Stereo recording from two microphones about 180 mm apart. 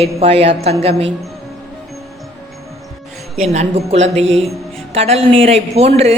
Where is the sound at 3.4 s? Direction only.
35° right (ahead or behind).